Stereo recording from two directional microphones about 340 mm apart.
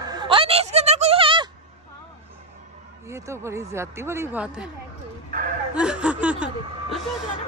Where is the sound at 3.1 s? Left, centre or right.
Centre.